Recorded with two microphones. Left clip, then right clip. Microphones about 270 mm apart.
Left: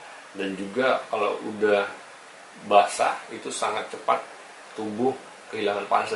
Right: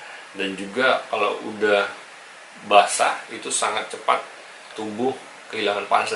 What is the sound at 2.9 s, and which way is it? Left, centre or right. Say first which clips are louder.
Speech: right 3 dB; centre.